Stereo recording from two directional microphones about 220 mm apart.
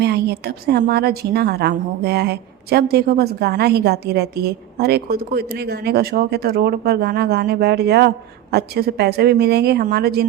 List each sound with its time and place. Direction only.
0.0 s a woman's voice: 50° right (ahead or behind)